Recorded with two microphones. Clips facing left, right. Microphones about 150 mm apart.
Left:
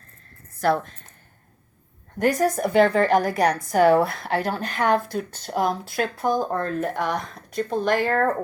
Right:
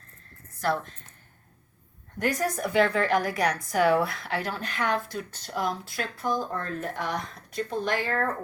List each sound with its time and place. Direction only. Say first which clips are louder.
0.6 s speech: left 6 dB; 50° left (ahead or behind)
2.4 s speech: left 5 dB; 45° left (ahead or behind); by 6.3 s 60° left (ahead or behind)
6.3 s speech: left 6 dB; 50° left (ahead or behind)